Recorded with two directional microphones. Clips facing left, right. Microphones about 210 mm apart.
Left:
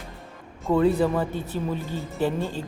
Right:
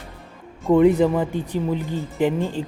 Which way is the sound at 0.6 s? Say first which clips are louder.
Right 5 dB; 15° right (ahead or behind).